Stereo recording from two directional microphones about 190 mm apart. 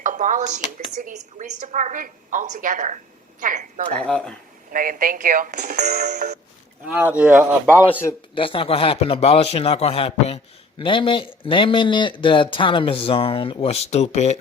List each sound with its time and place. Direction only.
0.0 s a woman's voice: 45° right (ahead or behind)
6.8 s speech: 5° right (ahead or behind)
7.9 s speech: 10° left (ahead or behind)
8.4 s a man's voice: 30° left (ahead or behind)